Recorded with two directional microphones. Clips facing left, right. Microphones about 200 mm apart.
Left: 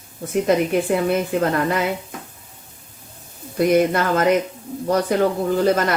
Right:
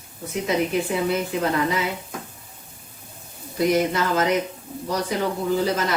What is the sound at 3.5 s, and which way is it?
A woman's voice, 55° left (ahead or behind).